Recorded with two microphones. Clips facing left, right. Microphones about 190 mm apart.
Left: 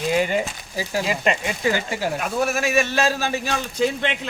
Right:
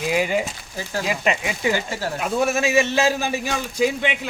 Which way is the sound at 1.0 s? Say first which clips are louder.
Right 2 dB; 5° right (ahead or behind).